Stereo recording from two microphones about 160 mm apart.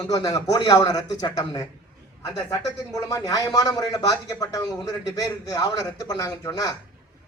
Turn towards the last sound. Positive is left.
turn(degrees=20)  # may be behind; listen again after turning